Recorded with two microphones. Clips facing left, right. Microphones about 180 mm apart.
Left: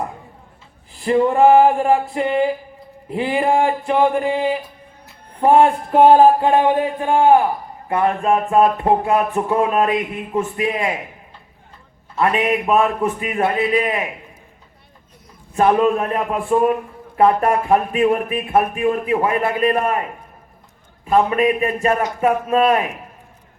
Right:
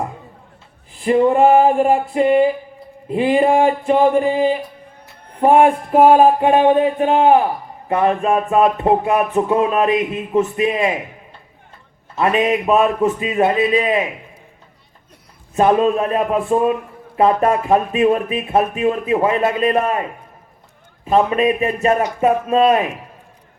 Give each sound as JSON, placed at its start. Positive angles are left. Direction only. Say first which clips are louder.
{"t": 0.9, "sound": "a sound", "louder": "right 2 dB", "side_deg": -20}
{"t": 5.4, "sound": "speech", "louder": "right 1 dB", "side_deg": -15}
{"t": 12.1, "sound": "speech", "louder": "right 2 dB", "side_deg": -25}
{"t": 15.5, "sound": "speech", "louder": "right 1 dB", "side_deg": -20}
{"t": 21.1, "sound": "speech", "louder": "right 1 dB", "side_deg": -25}